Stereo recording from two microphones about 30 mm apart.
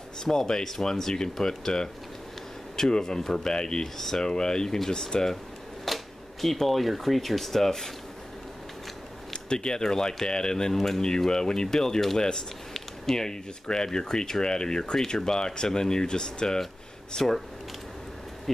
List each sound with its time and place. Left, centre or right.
0.2 s speech: centre
2.7 s speech: left
3.5 s speech: left
3.8 s speech: centre
5.9 s camera: centre
6.4 s speech: centre
9.3 s speech: left
13.1 s speech: left
17.1 s speech: centre